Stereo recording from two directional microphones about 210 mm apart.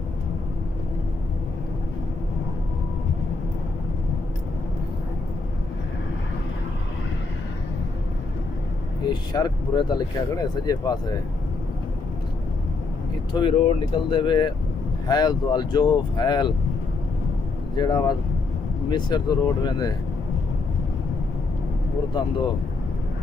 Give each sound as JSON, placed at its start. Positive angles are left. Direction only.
{"t": 9.0, "sound": "speech", "side_deg": 20}
{"t": 13.3, "sound": "speech", "side_deg": 20}
{"t": 17.7, "sound": "speech", "side_deg": 20}